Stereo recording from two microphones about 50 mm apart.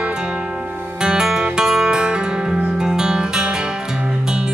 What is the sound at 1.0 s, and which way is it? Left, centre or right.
Music, centre.